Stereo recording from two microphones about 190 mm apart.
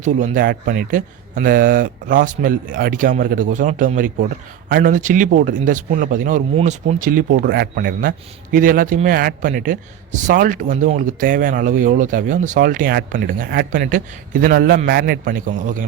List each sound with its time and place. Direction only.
0.0 s a man's voice: 40° right (ahead or behind)